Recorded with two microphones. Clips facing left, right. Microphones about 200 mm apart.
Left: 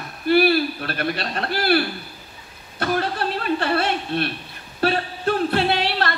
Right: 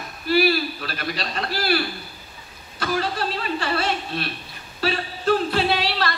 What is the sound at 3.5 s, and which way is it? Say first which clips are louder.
A man's voice: left 2 dB; 55° left (ahead or behind).